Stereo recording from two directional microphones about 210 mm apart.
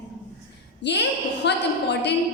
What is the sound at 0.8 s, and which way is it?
A woman's voice, 55° left (ahead or behind).